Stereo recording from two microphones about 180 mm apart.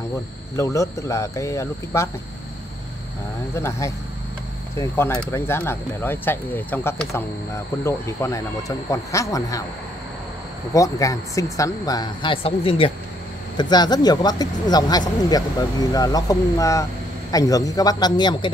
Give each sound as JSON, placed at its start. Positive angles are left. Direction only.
{"t": 0.6, "sound": "speech", "side_deg": 15}
{"t": 3.5, "sound": "speech", "side_deg": 15}
{"t": 10.7, "sound": "speech", "side_deg": 20}